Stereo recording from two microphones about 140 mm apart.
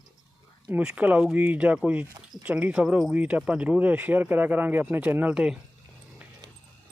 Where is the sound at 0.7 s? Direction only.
10° right (ahead or behind).